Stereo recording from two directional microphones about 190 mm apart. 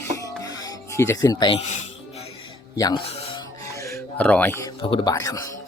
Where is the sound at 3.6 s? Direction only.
15° left (ahead or behind).